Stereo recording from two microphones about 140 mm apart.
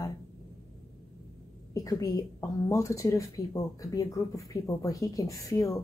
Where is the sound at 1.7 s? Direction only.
25° left (ahead or behind).